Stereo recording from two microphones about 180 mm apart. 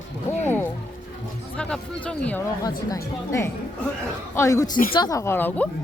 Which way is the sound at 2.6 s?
15° left (ahead or behind).